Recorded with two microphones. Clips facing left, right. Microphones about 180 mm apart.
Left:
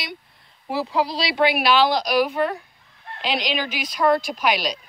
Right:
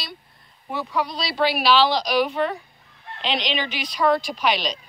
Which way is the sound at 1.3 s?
10° left (ahead or behind).